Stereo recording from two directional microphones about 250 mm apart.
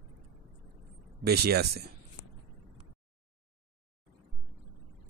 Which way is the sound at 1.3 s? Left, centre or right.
Right.